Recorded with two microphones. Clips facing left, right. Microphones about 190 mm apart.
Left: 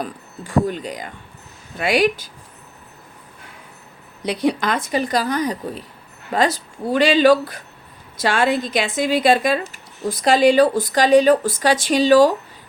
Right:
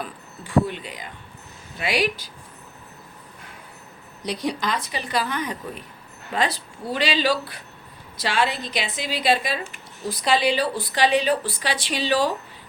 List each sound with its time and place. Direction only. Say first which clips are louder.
0.0 s speech: left 5 dB; 45° left (ahead or behind)
4.3 s speech: left 6 dB; 55° left (ahead or behind)